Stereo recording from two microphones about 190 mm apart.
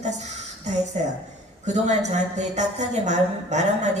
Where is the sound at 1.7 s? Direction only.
35° right (ahead or behind).